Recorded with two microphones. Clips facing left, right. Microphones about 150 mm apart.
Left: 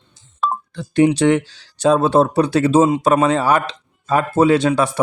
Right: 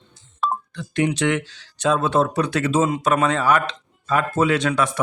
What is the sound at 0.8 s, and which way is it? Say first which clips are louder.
Speech: left 8 dB; 35° left (ahead or behind).